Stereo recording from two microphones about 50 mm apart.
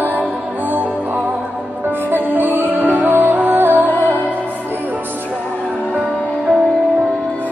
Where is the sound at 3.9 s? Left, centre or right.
Left.